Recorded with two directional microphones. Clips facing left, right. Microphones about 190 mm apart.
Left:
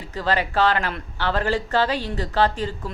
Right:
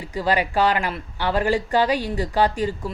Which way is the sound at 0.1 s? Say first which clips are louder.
Right 2 dB; 10° right (ahead or behind).